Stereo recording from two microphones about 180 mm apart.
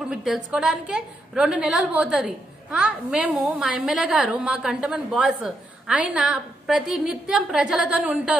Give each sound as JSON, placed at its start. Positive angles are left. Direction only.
{"t": 0.1, "sound": "a woman's voice", "side_deg": -5}